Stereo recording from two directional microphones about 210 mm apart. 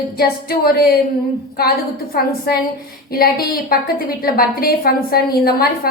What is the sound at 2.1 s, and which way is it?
A woman's voice, 45° left (ahead or behind).